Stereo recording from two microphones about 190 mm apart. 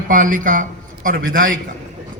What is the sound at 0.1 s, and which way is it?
A man's voice, 45° right (ahead or behind).